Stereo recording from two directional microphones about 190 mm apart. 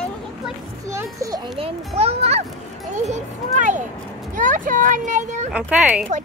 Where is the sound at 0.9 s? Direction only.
15° right (ahead or behind).